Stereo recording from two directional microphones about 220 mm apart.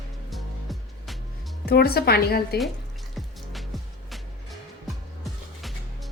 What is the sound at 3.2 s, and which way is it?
Music, centre (ahead or behind).